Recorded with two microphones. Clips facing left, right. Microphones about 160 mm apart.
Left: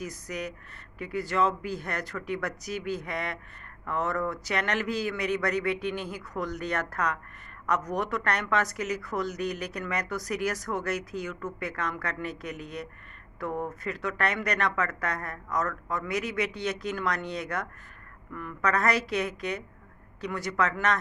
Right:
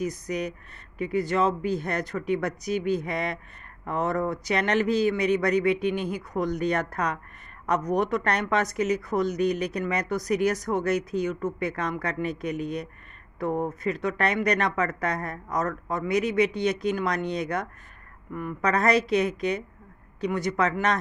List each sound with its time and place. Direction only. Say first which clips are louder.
0.0 s a woman's voice: right 6 dB; 20° right (ahead or behind)